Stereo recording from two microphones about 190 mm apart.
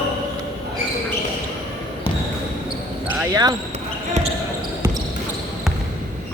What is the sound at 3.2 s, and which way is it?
Speech, 20° right (ahead or behind).